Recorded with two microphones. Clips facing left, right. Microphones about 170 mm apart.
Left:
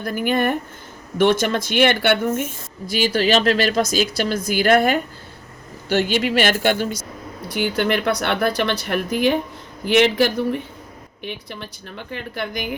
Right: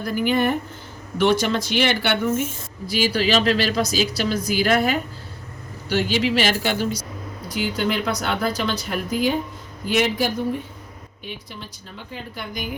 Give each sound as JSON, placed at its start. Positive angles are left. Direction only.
{"t": 0.0, "sound": "a woman's voice", "side_deg": 55}
{"t": 3.1, "sound": "a woman's voice", "side_deg": 45}